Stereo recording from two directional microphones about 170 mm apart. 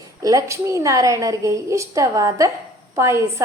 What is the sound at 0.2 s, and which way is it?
A woman's voice, 20° right (ahead or behind).